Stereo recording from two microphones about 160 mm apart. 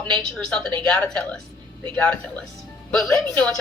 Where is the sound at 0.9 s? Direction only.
5° left (ahead or behind).